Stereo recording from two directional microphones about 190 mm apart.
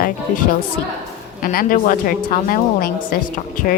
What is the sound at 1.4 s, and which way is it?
Speech, 50° left (ahead or behind).